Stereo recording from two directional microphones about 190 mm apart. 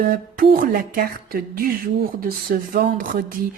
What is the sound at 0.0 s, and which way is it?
A woman's voice, 50° right (ahead or behind).